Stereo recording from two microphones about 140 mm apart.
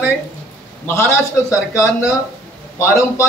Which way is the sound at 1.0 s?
20° left (ahead or behind).